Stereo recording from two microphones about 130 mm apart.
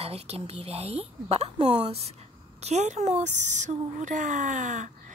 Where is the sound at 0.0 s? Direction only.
50° right (ahead or behind).